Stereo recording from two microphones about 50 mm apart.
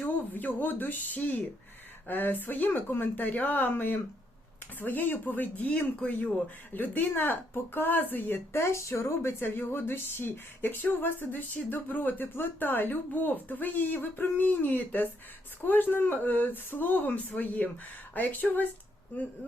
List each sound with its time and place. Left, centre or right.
0.0 s speech: left
6.7 s speech: left
8.5 s speech: left
9.4 s speech: left